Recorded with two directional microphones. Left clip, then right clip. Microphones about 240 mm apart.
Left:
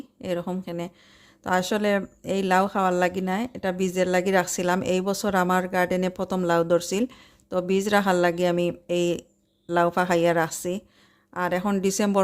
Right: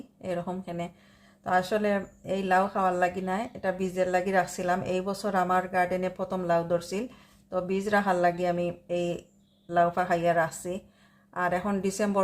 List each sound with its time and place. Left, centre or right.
0.2 s speech: left